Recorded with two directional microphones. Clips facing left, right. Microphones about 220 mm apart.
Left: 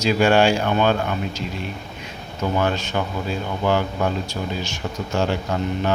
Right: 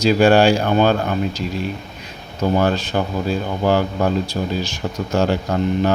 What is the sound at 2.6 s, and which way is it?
Speech, 35° right (ahead or behind).